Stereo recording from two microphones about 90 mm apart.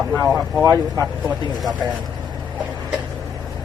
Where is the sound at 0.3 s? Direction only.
5° right (ahead or behind).